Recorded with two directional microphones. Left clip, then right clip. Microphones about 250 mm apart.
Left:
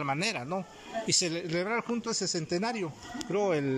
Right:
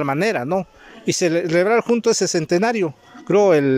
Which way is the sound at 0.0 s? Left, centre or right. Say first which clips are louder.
Right 12 dB; right.